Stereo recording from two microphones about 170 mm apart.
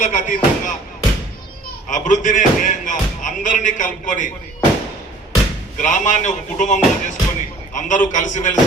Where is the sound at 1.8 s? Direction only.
45° left (ahead or behind).